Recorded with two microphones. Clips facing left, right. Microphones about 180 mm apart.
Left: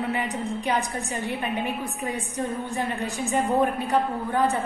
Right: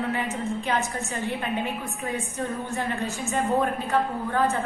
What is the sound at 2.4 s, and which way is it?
A woman's voice, 15° left (ahead or behind).